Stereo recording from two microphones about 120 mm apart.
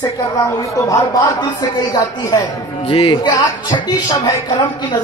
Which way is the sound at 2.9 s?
45° left (ahead or behind).